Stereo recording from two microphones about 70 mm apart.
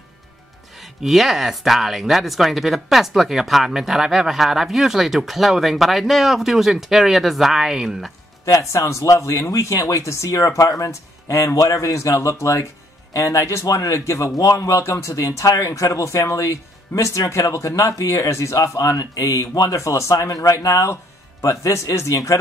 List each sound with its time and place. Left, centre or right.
0.7 s speech: centre
8.5 s speech: left
19.5 s speech: left
19.8 s speech: left